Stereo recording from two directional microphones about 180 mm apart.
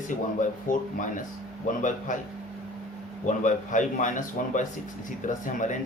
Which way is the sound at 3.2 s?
45° left (ahead or behind).